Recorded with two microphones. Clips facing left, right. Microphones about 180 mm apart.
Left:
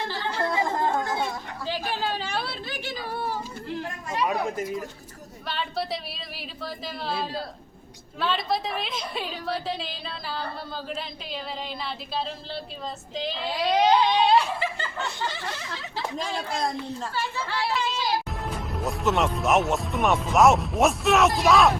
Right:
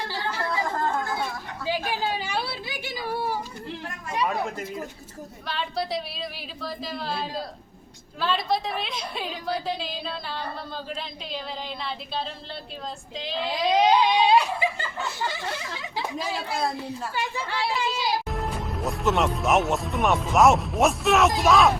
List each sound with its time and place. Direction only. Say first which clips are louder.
0.3 s chatter: left 3 dB; 25° left (ahead or behind)
1.6 s a sound: right 2 dB; 10° right (ahead or behind)
4.3 s chatter: left 2 dB; 20° left (ahead or behind)
5.5 s speech: right 1 dB; centre (ahead or behind)
13.6 s laughter: even; 10° right (ahead or behind)
18.3 s speech: right 2 dB; centre (ahead or behind)